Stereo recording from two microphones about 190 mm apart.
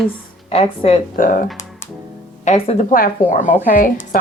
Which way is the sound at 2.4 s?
35° left (ahead or behind).